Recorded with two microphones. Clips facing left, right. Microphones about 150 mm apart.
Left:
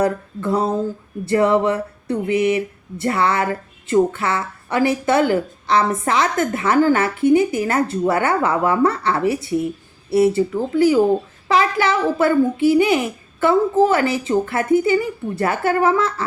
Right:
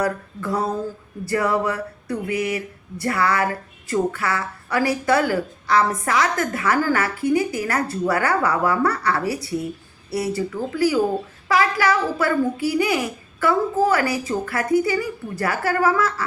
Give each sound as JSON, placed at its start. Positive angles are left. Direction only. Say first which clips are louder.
{"t": 0.0, "sound": "speech", "louder": "left 4 dB", "side_deg": 25}